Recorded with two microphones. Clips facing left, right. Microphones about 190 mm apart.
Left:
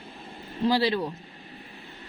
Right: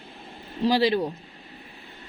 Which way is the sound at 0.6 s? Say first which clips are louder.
Right 2 dB; 15° right (ahead or behind).